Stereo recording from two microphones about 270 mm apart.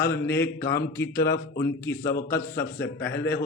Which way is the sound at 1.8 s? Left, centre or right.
Centre.